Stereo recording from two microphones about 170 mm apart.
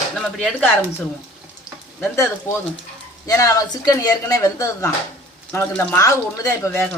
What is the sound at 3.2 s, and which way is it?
A woman's voice, 20° left (ahead or behind).